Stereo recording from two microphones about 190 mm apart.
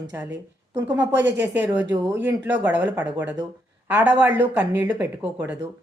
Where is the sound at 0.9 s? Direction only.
10° right (ahead or behind).